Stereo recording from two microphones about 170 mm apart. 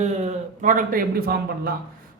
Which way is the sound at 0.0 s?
45° right (ahead or behind).